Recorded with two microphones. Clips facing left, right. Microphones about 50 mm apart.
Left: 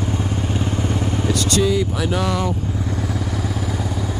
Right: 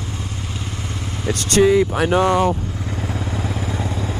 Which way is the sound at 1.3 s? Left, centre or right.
Right.